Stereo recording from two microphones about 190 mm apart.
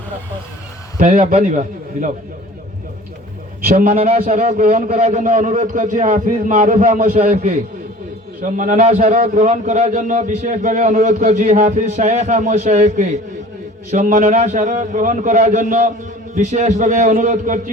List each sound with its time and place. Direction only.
0.9 s a man's voice: 40° right (ahead or behind)
3.8 s a man's voice: 35° right (ahead or behind)
9.1 s a man's voice: 50° right (ahead or behind)
9.4 s a man's voice: 35° right (ahead or behind)